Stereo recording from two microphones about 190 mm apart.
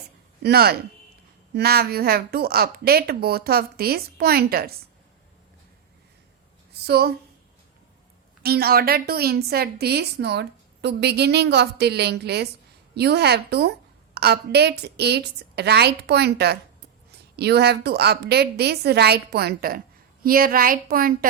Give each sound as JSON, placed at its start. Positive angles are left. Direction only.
{"t": 0.4, "sound": "a woman's voice", "side_deg": -55}
{"t": 6.8, "sound": "a woman's voice", "side_deg": -55}
{"t": 8.4, "sound": "a woman's voice", "side_deg": -55}